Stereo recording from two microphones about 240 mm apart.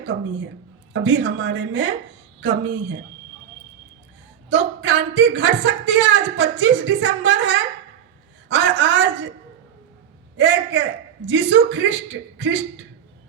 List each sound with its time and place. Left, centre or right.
0.0 s speech: right
4.4 s speech: right
10.3 s speech: right